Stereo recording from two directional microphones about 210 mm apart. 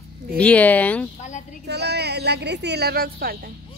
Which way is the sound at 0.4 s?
5° left (ahead or behind).